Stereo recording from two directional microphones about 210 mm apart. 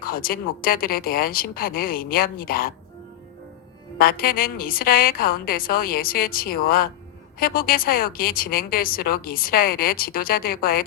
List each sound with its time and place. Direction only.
0.0 s a woman's voice: 45° left (ahead or behind)
3.9 s a woman's voice: 45° left (ahead or behind)